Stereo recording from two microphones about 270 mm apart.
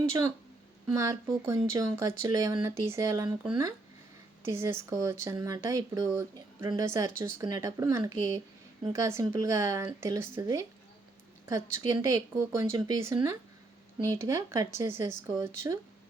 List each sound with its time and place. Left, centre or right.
0.9 s speech: centre